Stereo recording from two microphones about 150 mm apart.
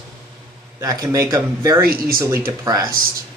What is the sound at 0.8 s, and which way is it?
Speech, 20° right (ahead or behind).